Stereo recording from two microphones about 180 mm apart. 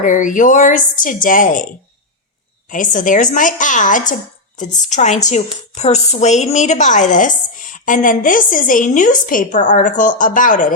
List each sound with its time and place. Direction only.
0.0 s speech: 45° left (ahead or behind)
2.6 s speech: 45° left (ahead or behind)